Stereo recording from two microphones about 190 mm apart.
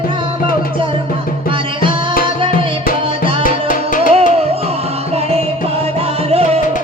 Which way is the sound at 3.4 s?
45° left (ahead or behind).